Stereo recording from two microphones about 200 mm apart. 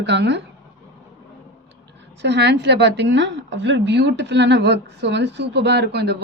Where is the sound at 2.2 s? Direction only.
60° right (ahead or behind).